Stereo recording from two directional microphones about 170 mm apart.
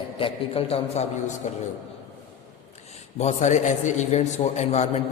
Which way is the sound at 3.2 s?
45° left (ahead or behind).